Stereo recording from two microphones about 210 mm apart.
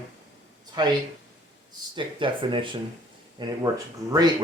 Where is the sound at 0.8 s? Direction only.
20° right (ahead or behind).